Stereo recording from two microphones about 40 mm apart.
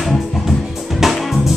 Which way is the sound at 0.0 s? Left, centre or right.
Centre.